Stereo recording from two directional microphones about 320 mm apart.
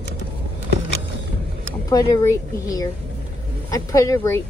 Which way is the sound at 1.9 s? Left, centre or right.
Centre.